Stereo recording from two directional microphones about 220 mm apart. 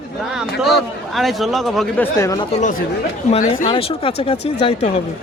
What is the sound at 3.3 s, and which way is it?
Speech, 30° left (ahead or behind).